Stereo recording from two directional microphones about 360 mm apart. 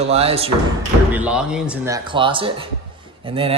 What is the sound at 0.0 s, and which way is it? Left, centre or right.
Speech, centre.